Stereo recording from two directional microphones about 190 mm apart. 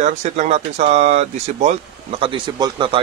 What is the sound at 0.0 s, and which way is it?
Speech, 40° right (ahead or behind).